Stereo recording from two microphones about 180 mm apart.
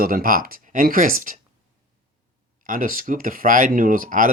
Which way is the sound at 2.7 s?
50° right (ahead or behind).